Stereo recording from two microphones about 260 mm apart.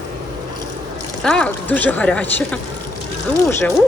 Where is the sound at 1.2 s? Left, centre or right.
Centre.